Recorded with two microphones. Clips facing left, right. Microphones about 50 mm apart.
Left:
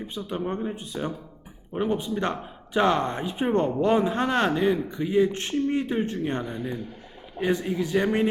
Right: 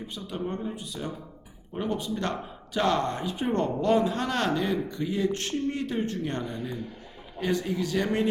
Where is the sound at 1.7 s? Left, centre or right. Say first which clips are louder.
Left 4 dB; left.